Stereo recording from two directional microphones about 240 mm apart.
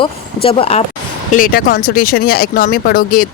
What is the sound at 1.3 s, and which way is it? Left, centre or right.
Speech, left.